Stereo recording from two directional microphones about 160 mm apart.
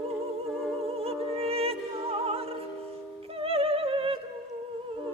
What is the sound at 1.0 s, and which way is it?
Opera, 40° right (ahead or behind).